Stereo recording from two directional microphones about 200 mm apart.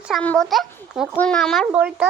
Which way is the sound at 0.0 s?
Centre (ahead or behind).